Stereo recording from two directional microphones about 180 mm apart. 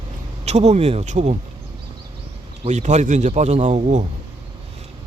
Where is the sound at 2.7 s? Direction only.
40° right (ahead or behind).